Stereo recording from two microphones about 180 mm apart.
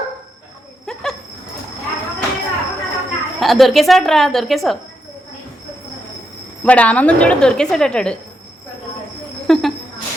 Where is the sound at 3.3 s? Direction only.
Centre (ahead or behind).